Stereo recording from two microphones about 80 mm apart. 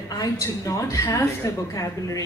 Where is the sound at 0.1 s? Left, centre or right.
Left.